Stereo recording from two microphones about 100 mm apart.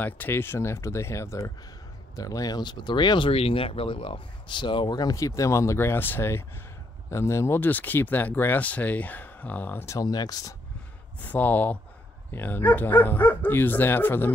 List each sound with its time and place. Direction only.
0.0 s speech: 20° left (ahead or behind); by 3.3 s 50° left (ahead or behind)
3.3 s speech: 75° left (ahead or behind); by 9.9 s 20° left (ahead or behind)
9.9 s speech: 40° left (ahead or behind)
11.1 s speech: 15° left (ahead or behind)